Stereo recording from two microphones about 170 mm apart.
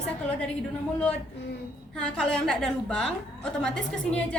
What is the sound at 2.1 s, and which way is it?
A woman's voice, 5° left (ahead or behind).